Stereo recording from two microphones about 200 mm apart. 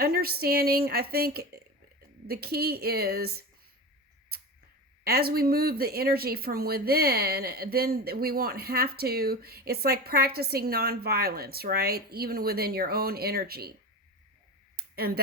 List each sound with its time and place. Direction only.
0.0 s speech: 50° right (ahead or behind)
5.0 s speech: 50° right (ahead or behind)
14.8 s a sound: 50° right (ahead or behind)